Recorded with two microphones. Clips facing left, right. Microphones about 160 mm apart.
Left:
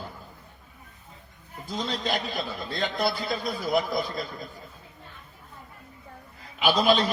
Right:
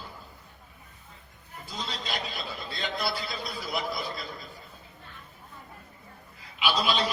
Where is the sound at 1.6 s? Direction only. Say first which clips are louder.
Left 7 dB; 50° left (ahead or behind).